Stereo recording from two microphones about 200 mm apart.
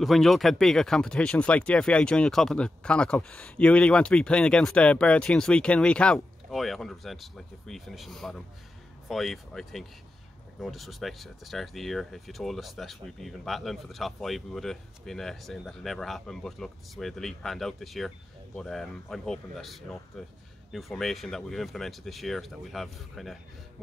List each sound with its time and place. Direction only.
0.0 s speech: centre (ahead or behind)